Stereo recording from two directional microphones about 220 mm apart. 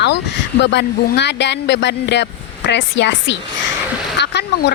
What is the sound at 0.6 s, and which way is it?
A woman's voice, 50° left (ahead or behind).